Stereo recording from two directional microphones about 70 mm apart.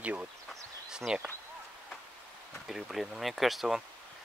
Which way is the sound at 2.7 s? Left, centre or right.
Centre.